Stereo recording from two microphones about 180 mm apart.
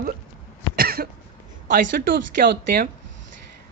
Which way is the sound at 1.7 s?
50° right (ahead or behind).